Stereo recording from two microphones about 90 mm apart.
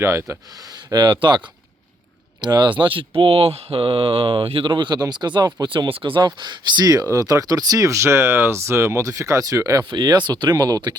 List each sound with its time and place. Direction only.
0.0 s speech: 30° right (ahead or behind)
0.9 s speech: 55° right (ahead or behind)
2.4 s speech: 55° right (ahead or behind)
3.2 s speech: 90° right; by 9.8 s 40° right (ahead or behind)
9.9 s speech: 50° right (ahead or behind)